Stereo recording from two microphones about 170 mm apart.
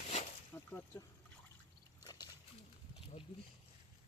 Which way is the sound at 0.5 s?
15° left (ahead or behind).